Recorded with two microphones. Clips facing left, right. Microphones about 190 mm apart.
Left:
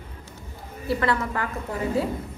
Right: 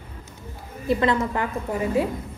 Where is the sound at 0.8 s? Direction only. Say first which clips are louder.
Right 3 dB; 20° right (ahead or behind).